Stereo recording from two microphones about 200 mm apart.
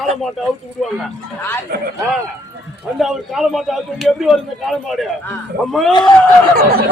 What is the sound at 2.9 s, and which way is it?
A man's voice, centre (ahead or behind).